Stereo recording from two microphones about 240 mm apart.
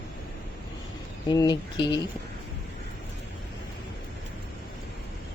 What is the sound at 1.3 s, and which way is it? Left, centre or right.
Speech, centre.